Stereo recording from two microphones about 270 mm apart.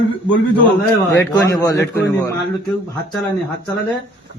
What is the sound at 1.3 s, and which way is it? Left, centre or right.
Speech, centre.